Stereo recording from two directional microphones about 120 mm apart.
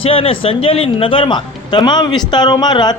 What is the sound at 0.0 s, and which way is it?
A man's voice, 50° left (ahead or behind).